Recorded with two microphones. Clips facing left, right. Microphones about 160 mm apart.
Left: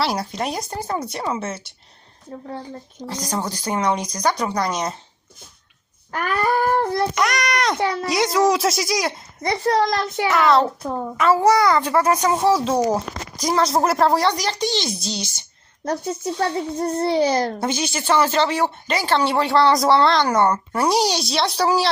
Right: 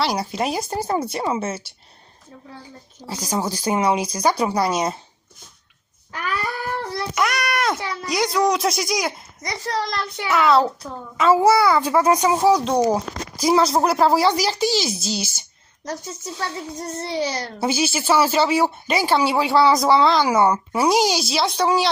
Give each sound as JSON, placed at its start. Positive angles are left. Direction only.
{"t": 0.0, "sound": "a child's voice", "side_deg": 0}
{"t": 2.3, "sound": "a child's voice", "side_deg": 45}
{"t": 3.1, "sound": "speech", "side_deg": -5}
{"t": 6.1, "sound": "a sound", "side_deg": 50}
{"t": 7.2, "sound": "a child's voice", "side_deg": 0}
{"t": 9.5, "sound": "a child's voice", "side_deg": 55}
{"t": 10.3, "sound": "a child's voice", "side_deg": 0}
{"t": 10.8, "sound": "a child's voice", "side_deg": 55}
{"t": 11.2, "sound": "a child's voice", "side_deg": -10}
{"t": 15.8, "sound": "a child's voice", "side_deg": 55}
{"t": 17.6, "sound": "a child's voice", "side_deg": -5}